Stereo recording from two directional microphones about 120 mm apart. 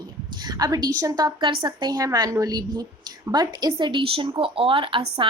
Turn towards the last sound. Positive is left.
turn(degrees=-45)  # may be behind; listen again after turning